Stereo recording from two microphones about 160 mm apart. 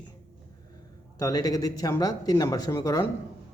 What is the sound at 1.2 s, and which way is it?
Speech, 25° left (ahead or behind).